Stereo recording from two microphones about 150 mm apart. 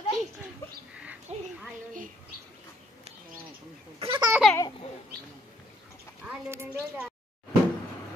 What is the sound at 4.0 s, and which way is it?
Speech, 30° right (ahead or behind).